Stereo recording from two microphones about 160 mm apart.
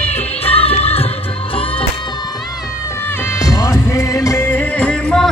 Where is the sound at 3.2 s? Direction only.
20° left (ahead or behind).